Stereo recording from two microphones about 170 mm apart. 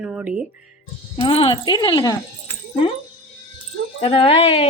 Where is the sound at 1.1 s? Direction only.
35° left (ahead or behind).